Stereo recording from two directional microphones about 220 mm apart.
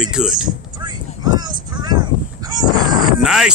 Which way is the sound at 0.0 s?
5° right (ahead or behind).